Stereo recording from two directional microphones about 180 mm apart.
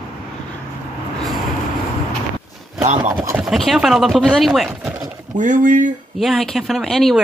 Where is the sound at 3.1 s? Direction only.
15° right (ahead or behind).